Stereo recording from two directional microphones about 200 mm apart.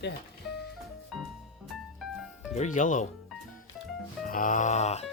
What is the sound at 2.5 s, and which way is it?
Speech, 40° left (ahead or behind).